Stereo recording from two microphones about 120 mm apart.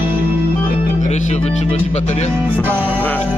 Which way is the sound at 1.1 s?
70° left (ahead or behind).